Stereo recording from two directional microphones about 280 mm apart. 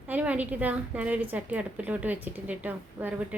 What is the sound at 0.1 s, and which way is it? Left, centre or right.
A woman's voice, centre.